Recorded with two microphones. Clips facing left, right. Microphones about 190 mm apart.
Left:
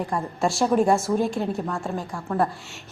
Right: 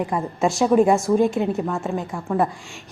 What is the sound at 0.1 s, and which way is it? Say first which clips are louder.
A woman's voice: right 1 dB; 5° right (ahead or behind).